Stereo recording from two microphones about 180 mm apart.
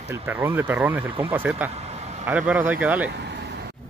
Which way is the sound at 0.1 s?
10° right (ahead or behind).